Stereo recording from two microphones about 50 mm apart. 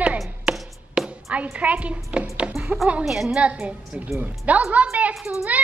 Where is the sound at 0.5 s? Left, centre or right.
Right.